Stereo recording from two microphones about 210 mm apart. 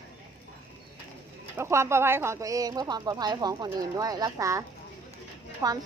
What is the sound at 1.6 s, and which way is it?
Speech, 10° right (ahead or behind).